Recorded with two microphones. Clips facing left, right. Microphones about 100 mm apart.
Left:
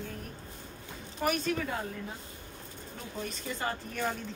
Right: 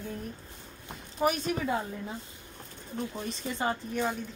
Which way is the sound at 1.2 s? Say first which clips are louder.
Right 2 dB; 20° right (ahead or behind).